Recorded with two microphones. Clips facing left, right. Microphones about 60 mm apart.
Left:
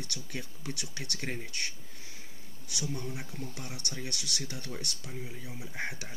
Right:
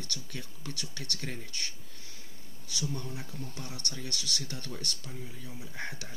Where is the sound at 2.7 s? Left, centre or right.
Centre.